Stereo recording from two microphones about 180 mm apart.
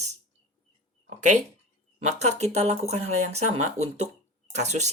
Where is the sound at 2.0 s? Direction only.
40° right (ahead or behind).